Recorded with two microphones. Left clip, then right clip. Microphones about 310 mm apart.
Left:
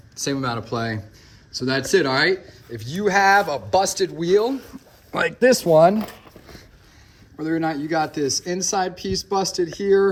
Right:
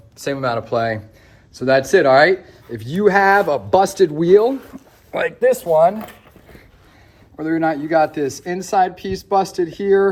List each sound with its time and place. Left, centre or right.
0.2 s speech: centre
5.1 s speech: centre
5.5 s speech: left
7.3 s speech: centre